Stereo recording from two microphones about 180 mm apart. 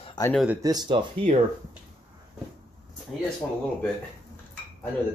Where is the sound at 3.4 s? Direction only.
10° left (ahead or behind).